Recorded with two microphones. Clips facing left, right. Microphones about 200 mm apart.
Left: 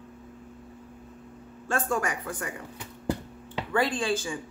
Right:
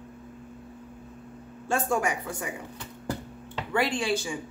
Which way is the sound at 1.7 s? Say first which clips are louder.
Right 2 dB; 10° right (ahead or behind).